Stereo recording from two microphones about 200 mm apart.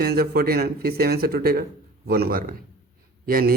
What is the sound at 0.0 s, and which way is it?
Speech, 50° right (ahead or behind).